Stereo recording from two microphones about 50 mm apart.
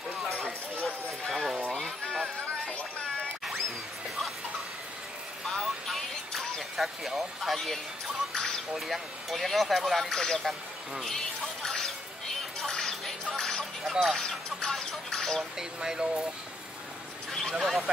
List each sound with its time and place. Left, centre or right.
1.3 s a sound: centre
2.0 s clip-clop: left
5.5 s music: centre
6.8 s speech: centre
11.4 s music: centre
13.8 s music: centre
14.6 s a sound: centre
15.8 s speech: centre
17.3 s a sound: centre
17.6 s speech: centre